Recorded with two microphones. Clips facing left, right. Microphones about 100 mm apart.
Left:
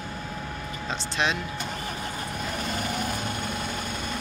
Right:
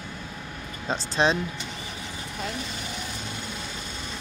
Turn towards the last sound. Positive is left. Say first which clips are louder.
# left 5 dB
turn(degrees=55)  # may be behind; listen again after turning